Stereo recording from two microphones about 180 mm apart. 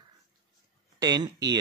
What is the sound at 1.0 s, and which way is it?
Speech, 20° right (ahead or behind).